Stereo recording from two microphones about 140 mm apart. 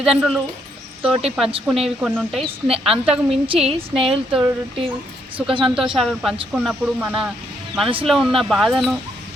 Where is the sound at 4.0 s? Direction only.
40° right (ahead or behind).